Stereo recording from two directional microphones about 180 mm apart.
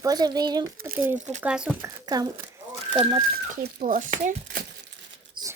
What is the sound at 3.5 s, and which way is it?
Speech, 50° right (ahead or behind).